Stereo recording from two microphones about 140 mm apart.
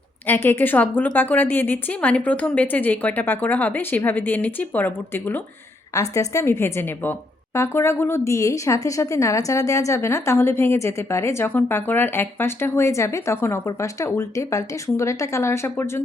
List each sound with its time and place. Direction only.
0.3 s a woman's voice: 15° left (ahead or behind)